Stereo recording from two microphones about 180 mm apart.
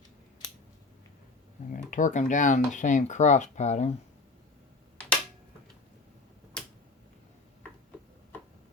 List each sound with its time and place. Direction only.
1.7 s speech: 45° left (ahead or behind)